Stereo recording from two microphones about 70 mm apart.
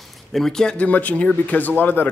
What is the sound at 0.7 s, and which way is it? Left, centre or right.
Speech, left.